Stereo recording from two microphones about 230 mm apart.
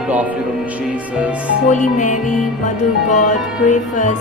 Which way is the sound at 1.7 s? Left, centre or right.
Left.